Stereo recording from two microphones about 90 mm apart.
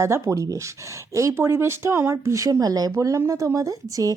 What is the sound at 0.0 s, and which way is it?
Speech, 35° right (ahead or behind).